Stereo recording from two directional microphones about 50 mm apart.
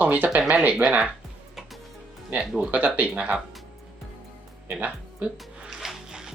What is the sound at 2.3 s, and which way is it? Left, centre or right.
Speech, centre.